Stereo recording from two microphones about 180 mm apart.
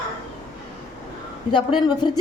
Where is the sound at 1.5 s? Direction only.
25° left (ahead or behind).